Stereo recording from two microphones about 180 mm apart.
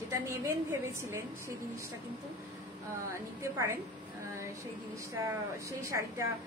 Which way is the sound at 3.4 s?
15° right (ahead or behind).